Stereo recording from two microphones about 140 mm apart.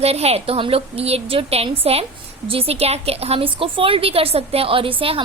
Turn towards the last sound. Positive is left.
turn(degrees=-40)  # may be behind; listen again after turning